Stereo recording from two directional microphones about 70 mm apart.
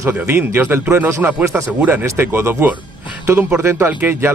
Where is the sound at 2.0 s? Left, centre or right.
Right.